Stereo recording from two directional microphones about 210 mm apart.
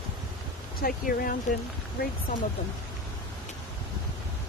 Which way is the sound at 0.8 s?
45° left (ahead or behind).